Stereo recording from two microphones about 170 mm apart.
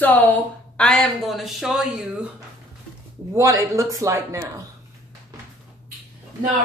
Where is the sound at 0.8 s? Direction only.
5° left (ahead or behind).